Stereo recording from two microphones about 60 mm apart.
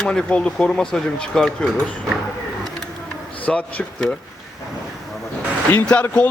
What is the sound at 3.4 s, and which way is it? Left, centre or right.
Speech, left.